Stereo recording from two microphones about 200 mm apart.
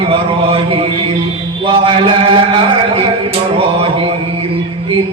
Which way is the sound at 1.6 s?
25° right (ahead or behind).